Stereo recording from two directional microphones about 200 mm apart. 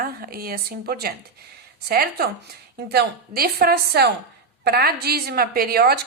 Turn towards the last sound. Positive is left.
turn(degrees=-50)  # may be behind; listen again after turning